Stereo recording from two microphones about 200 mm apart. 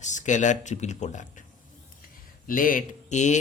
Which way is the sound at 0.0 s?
35° left (ahead or behind).